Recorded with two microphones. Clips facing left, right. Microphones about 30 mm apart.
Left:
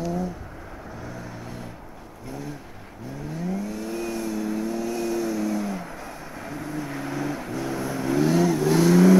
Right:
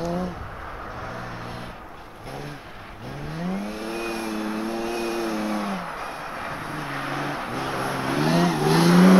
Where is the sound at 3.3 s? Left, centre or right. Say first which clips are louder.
Even; right.